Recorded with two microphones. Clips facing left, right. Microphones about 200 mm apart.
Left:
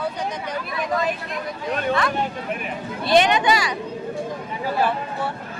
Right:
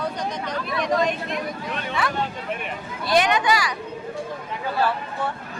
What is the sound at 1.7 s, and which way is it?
Speech, 40° left (ahead or behind).